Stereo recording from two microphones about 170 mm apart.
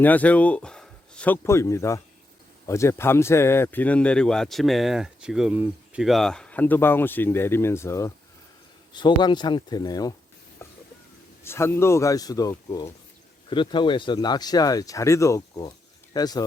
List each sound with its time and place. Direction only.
0.0 s speech: 10° left (ahead or behind)
8.9 s speech: 25° left (ahead or behind)
10.6 s a sound: 15° left (ahead or behind)
11.4 s speech: 15° left (ahead or behind)